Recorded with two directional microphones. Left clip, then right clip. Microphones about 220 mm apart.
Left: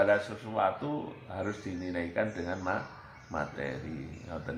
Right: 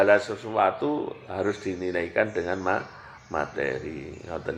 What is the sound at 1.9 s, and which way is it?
A man's voice, 40° right (ahead or behind).